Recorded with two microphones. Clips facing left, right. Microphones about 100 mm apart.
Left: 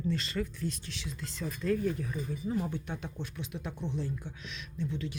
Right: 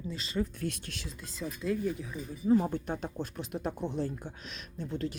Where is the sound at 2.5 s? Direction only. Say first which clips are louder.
Right 9 dB; 40° right (ahead or behind).